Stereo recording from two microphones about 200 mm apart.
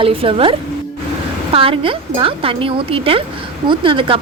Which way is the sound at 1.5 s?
25° right (ahead or behind).